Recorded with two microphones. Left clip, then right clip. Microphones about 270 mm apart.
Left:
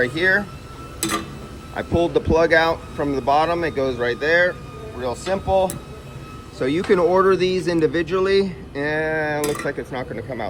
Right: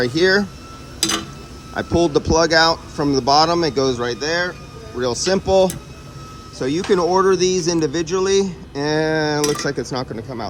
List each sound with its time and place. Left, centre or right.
0.0 s speech: right
0.9 s tick-tock: centre
2.1 s speech: centre
5.0 s speech: right
6.6 s speech: centre